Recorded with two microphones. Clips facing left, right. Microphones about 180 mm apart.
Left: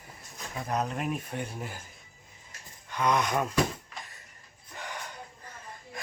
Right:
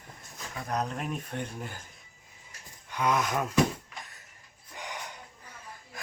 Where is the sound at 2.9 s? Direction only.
5° right (ahead or behind).